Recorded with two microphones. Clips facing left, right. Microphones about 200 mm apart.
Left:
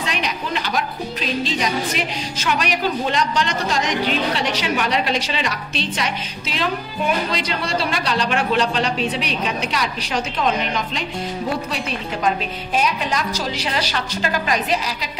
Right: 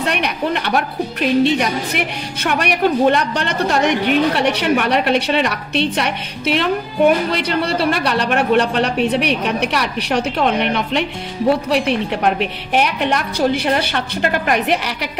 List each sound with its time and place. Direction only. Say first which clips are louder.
0.0 s a woman's voice: right 6 dB; 60° right (ahead or behind)